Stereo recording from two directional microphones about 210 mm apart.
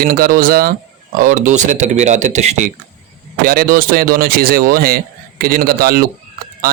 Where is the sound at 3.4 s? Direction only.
45° right (ahead or behind).